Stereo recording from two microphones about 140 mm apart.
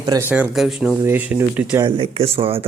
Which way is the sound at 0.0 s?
25° right (ahead or behind).